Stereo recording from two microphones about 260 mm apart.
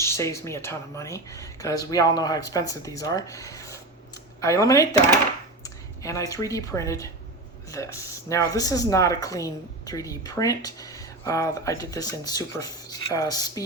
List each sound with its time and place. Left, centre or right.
0.0 s speech: centre